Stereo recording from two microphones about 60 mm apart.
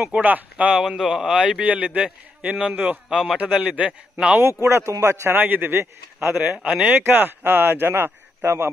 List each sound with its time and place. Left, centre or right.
0.2 s a man's voice: right
0.7 s a man's voice: centre
1.4 s a man's voice: centre
3.1 s a man's voice: centre
3.3 s a man's voice: right
4.4 s speech: right
6.4 s a man's voice: right
7.1 s speech: right